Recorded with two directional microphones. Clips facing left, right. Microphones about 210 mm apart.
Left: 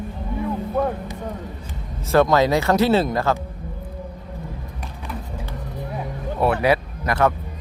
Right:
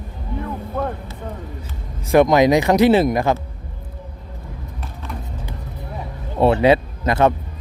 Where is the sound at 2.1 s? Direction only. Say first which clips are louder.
Right 4 dB; 15° right (ahead or behind).